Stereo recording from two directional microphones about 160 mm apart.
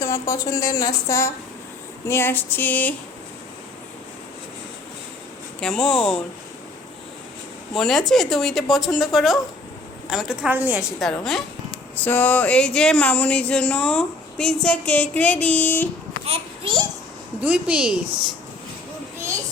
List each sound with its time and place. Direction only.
0.0 s speech: 20° left (ahead or behind)
5.5 s a woman's voice: 5° left (ahead or behind)
7.7 s a woman's voice: centre (ahead or behind)
11.0 s a woman's voice: centre (ahead or behind)
16.2 s a child's voice: 35° right (ahead or behind)
17.4 s a woman's voice: 5° right (ahead or behind)